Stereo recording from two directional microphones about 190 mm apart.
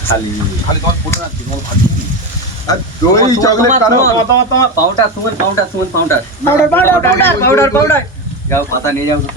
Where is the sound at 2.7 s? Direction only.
20° left (ahead or behind).